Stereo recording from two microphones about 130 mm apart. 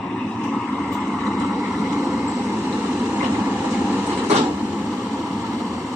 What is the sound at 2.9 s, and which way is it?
Vehicle, 15° right (ahead or behind).